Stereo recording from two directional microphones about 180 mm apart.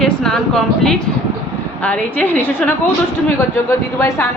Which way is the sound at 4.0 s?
15° left (ahead or behind).